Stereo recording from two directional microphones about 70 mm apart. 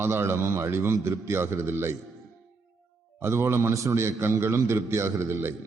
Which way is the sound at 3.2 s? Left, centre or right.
Right.